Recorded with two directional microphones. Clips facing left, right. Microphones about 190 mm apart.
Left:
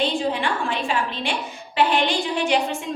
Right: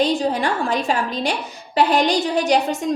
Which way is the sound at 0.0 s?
40° right (ahead or behind).